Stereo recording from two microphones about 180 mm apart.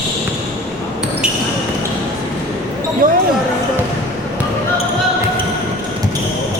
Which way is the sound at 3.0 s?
50° right (ahead or behind).